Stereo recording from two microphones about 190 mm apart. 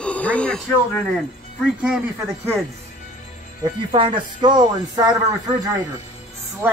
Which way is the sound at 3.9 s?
25° right (ahead or behind).